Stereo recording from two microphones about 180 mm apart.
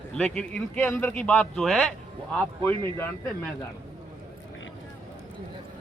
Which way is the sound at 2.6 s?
10° left (ahead or behind).